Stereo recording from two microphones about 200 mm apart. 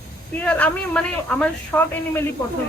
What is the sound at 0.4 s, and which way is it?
A man's voice, 5° left (ahead or behind).